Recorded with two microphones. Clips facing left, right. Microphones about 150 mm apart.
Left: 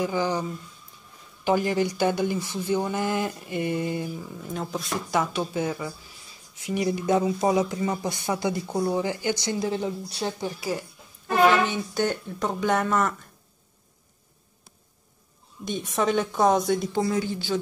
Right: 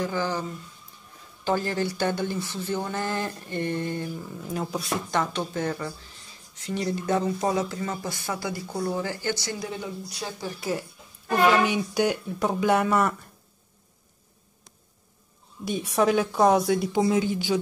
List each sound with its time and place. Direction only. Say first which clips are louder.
0.0 s speech: left 2 dB; 15° left (ahead or behind)
10.6 s speech: right 3 dB; centre (ahead or behind)
11.2 s speech: left 1 dB; 10° right (ahead or behind)
15.6 s speech: right 2 dB; 5° right (ahead or behind)
17.0 s speech: right 3 dB; 15° right (ahead or behind)